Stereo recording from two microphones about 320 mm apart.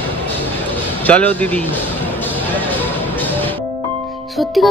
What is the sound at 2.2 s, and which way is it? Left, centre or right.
Music, centre.